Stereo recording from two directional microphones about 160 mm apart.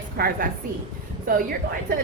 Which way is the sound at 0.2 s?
75° right (ahead or behind).